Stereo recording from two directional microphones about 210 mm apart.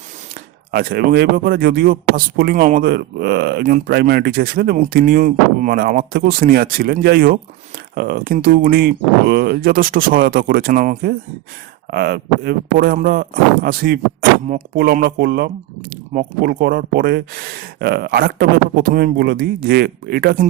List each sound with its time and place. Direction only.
0.7 s a man's voice: 45° right (ahead or behind)